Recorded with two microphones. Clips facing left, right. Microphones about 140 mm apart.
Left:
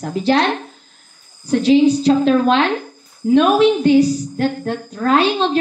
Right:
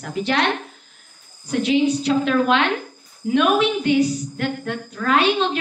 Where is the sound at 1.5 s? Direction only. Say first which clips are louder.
Left 6 dB; 35° left (ahead or behind).